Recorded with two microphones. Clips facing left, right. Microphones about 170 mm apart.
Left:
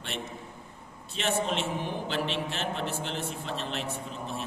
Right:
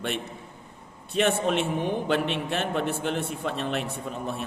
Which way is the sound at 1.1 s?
55° right (ahead or behind).